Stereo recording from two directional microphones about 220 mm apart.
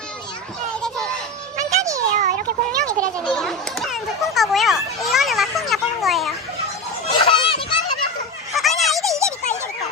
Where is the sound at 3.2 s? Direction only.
5° left (ahead or behind).